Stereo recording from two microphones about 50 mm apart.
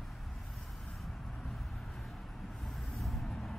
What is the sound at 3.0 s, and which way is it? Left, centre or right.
Vehicle, centre.